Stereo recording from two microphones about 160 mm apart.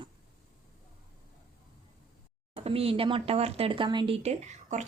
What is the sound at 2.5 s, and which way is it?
A woman's voice, 35° right (ahead or behind).